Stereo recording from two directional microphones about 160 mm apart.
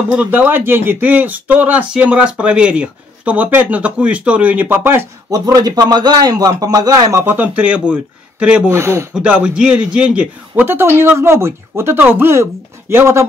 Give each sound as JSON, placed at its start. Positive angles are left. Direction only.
{"t": 0.1, "sound": "speech", "side_deg": -10}
{"t": 5.4, "sound": "a man's voice", "side_deg": -25}